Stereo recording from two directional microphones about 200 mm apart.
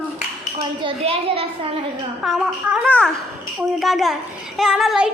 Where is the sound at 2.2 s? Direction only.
5° right (ahead or behind).